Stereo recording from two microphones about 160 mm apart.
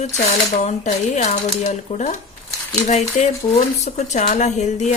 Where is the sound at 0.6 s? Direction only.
45° left (ahead or behind).